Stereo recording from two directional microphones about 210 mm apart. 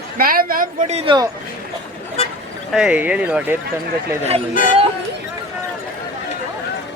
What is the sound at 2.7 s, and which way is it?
Speech, centre (ahead or behind).